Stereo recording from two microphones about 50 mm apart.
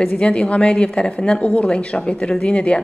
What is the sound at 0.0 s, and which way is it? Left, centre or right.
A woman's voice, left.